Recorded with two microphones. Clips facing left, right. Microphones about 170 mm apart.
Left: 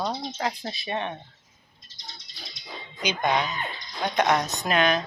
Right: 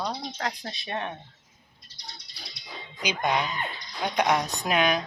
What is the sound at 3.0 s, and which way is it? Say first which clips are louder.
A woman's voice: left 2 dB; 10° right (ahead or behind).